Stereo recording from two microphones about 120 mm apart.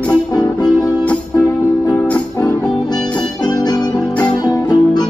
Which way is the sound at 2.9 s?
5° left (ahead or behind).